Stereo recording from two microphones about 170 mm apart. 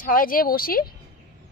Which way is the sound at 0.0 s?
55° left (ahead or behind).